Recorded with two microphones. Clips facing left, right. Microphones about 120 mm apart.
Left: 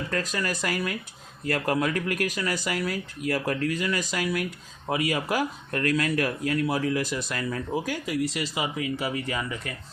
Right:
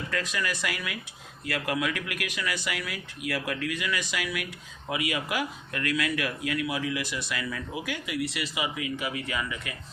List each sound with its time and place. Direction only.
0.1 s speech: 40° left (ahead or behind)